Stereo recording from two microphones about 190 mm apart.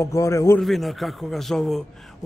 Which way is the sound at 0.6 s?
Centre (ahead or behind).